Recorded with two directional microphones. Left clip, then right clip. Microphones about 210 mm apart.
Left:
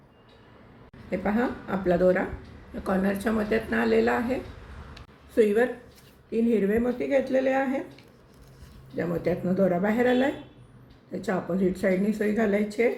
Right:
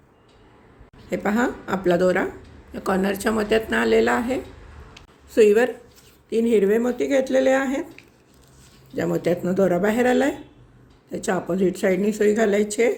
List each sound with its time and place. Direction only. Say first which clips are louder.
1.1 s speech: right 4 dB; 50° right (ahead or behind)
9.0 s speech: right 5 dB; 50° right (ahead or behind)